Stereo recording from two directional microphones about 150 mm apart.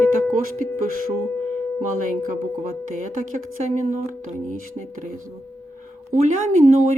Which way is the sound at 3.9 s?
55° right (ahead or behind).